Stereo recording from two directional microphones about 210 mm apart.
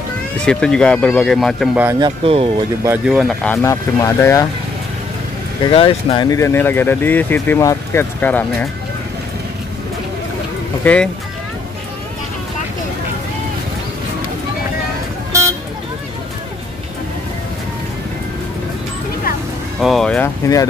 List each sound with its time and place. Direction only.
0.5 s speech: 5° left (ahead or behind)
1.9 s speech: 20° right (ahead or behind)
2.8 s speech: 5° right (ahead or behind)
3.6 s speech: 15° left (ahead or behind)
5.7 s speech: 25° left (ahead or behind); by 8.6 s 5° left (ahead or behind)
10.8 s speech: 5° left (ahead or behind)
19.8 s vehicle: centre (ahead or behind)